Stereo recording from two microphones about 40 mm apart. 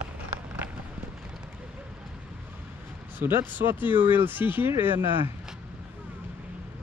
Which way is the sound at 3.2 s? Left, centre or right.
Right.